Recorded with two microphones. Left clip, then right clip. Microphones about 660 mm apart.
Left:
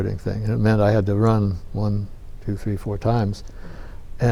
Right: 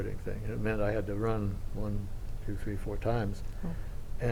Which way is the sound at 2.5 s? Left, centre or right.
Left.